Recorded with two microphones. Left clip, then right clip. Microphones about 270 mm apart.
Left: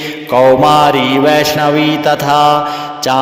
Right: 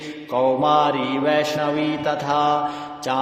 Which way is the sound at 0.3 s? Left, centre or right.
Left.